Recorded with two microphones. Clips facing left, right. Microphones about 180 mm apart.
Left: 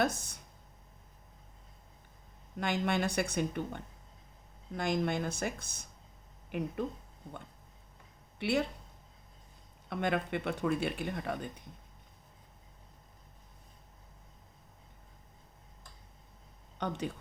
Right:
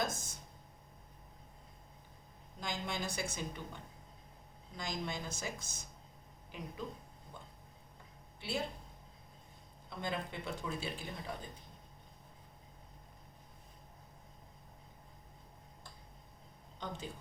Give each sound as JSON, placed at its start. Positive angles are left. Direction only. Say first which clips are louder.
{"t": 0.0, "sound": "speech", "louder": "left 7 dB", "side_deg": 65}
{"t": 2.6, "sound": "speech", "louder": "left 9 dB", "side_deg": 65}
{"t": 8.4, "sound": "speech", "louder": "left 9 dB", "side_deg": 70}
{"t": 9.9, "sound": "speech", "louder": "left 8 dB", "side_deg": 65}
{"t": 16.7, "sound": "a woman's voice", "louder": "left 8 dB", "side_deg": 65}